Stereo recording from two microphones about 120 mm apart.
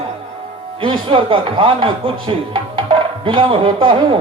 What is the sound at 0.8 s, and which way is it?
Tabla, 45° right (ahead or behind).